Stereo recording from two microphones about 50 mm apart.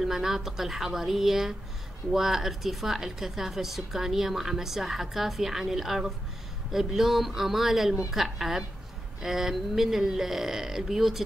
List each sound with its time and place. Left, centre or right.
0.0 s a woman's voice: centre